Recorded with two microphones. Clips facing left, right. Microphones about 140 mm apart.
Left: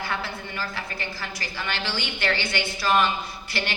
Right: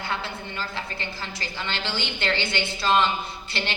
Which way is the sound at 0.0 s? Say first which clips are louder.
Even; 25° right (ahead or behind).